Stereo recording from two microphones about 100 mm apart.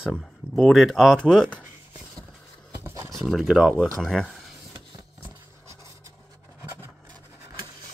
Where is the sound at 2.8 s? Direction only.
35° right (ahead or behind).